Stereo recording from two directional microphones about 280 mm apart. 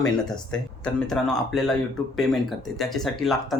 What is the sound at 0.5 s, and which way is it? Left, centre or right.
Speech, centre.